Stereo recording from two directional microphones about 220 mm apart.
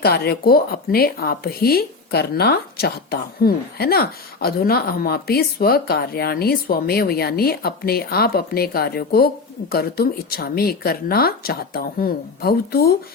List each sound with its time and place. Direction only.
0.0 s speech: 45° left (ahead or behind)